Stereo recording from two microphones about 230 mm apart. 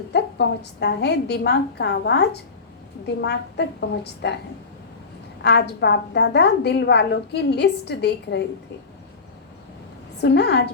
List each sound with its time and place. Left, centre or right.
0.1 s a woman's voice: left
5.4 s a woman's voice: left
10.2 s a woman's voice: left